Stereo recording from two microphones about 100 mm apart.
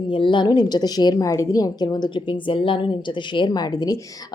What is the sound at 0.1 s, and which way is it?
A woman's voice, 55° left (ahead or behind).